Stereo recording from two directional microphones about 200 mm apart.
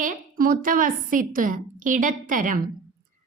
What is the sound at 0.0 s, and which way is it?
Speech, 45° right (ahead or behind).